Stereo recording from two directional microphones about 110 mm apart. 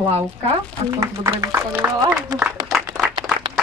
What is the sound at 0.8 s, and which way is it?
Speech, 30° right (ahead or behind).